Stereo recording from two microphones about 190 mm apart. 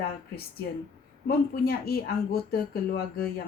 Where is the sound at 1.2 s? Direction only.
55° left (ahead or behind).